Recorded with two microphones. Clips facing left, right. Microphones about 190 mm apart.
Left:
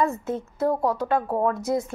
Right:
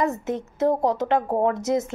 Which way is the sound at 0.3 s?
20° right (ahead or behind).